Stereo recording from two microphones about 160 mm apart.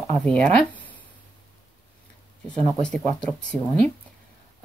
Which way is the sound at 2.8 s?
5° left (ahead or behind).